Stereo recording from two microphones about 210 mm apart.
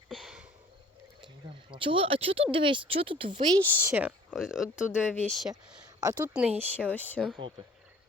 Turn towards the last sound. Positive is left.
turn(degrees=5)  # may be behind; listen again after turning